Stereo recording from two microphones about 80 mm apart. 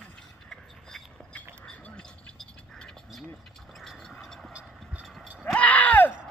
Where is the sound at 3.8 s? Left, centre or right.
Centre.